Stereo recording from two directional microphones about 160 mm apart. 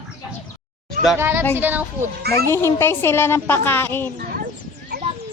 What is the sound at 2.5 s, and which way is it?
Speech, 15° left (ahead or behind).